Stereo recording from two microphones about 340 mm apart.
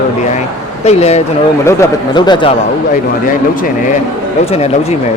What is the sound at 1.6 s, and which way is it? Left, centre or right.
Speech, centre.